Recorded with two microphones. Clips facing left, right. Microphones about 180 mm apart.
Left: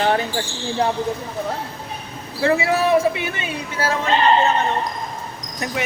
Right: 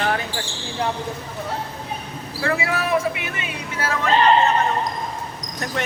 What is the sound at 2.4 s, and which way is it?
Speech, 25° left (ahead or behind).